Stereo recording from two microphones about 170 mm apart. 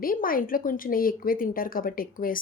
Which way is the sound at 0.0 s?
55° left (ahead or behind).